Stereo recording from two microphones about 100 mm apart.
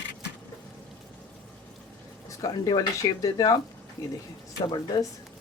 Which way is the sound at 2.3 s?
35° left (ahead or behind).